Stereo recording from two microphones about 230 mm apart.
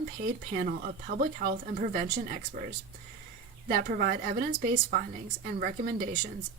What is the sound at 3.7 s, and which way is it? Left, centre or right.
Speech, right.